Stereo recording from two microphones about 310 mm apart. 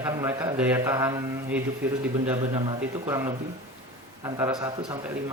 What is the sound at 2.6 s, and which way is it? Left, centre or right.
A man's voice, centre.